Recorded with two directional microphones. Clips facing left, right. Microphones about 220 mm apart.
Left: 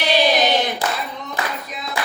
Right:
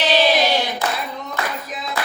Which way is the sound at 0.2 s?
20° left (ahead or behind).